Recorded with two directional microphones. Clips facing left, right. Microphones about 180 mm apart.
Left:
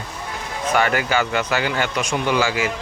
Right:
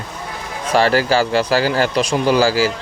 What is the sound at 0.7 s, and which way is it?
Speech, 30° right (ahead or behind).